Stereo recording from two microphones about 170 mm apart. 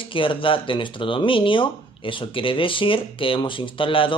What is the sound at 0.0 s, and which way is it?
Speech, 30° left (ahead or behind).